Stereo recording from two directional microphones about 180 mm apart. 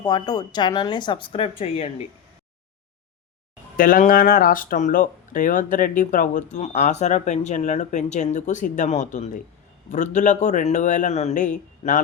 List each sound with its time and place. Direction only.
0.0 s speech: 20° left (ahead or behind)
3.8 s a man's voice: 50° left (ahead or behind)